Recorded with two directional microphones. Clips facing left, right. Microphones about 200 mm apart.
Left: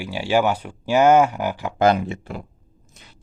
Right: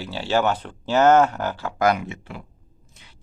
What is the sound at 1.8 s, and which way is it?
Speech, 30° left (ahead or behind).